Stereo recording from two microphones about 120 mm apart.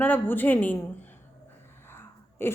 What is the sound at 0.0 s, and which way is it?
Speech, 15° left (ahead or behind).